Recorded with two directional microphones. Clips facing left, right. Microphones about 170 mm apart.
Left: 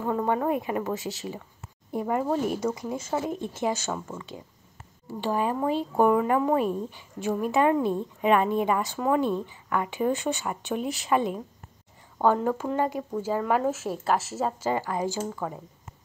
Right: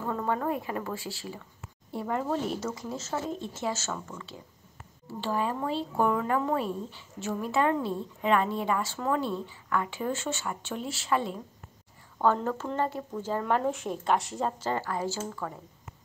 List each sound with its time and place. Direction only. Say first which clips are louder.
0.0 s speech: left 4 dB; 20° left (ahead or behind)